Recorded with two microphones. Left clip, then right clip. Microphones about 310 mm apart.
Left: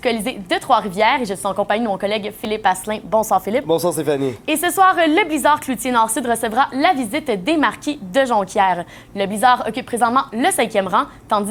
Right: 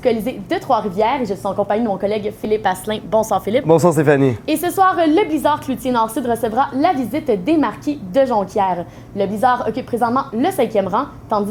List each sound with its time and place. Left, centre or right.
0.0 s a woman's voice: left
3.7 s speech: right
4.4 s a woman's voice: left